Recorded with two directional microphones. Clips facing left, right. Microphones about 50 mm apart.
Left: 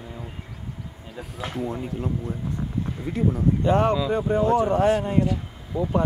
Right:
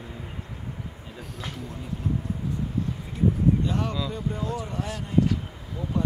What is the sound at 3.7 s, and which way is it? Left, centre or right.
Speech, left.